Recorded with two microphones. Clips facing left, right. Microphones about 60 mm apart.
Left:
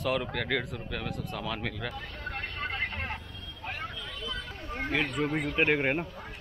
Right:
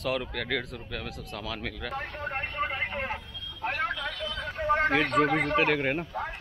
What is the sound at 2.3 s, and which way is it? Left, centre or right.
Vehicle, right.